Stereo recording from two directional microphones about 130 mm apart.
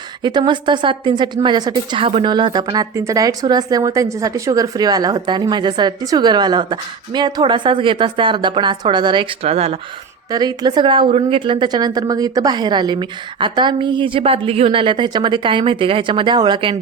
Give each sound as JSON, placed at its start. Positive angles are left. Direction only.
{"t": 0.2, "sound": "a woman's voice", "side_deg": -35}
{"t": 10.3, "sound": "a woman's voice", "side_deg": -30}